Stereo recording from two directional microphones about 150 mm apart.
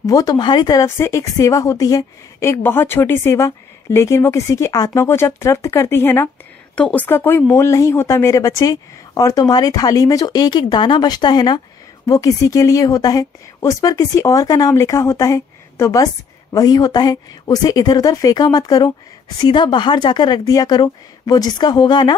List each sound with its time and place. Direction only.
0.0 s speech: 25° left (ahead or behind)